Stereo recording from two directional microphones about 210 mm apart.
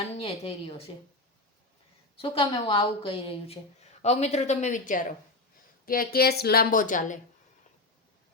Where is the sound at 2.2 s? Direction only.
25° left (ahead or behind).